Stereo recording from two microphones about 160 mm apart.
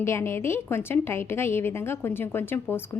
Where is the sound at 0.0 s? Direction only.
15° left (ahead or behind).